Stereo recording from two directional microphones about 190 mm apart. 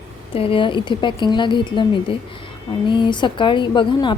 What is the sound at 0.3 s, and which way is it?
A woman's voice, 30° left (ahead or behind).